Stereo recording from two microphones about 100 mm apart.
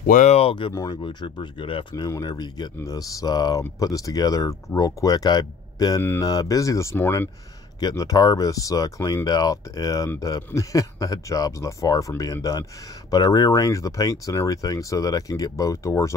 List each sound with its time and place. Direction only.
0.3 s speech: 75° left (ahead or behind)
1.0 s speech: 50° left (ahead or behind)
2.0 s speech: 40° left (ahead or behind)
7.8 s speech: 35° left (ahead or behind)